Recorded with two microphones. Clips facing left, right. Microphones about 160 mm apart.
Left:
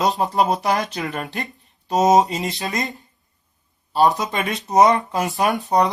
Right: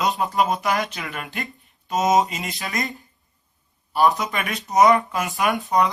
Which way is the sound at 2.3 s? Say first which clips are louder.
Left 5 dB; 25° left (ahead or behind).